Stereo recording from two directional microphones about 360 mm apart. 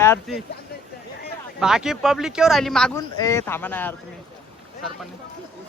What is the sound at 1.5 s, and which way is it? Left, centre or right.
Speech, centre.